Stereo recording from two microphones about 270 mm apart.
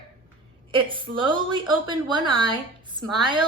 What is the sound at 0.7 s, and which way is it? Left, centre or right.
A woman's voice, centre.